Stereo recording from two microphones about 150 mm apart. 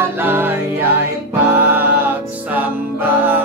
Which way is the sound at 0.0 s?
15° right (ahead or behind).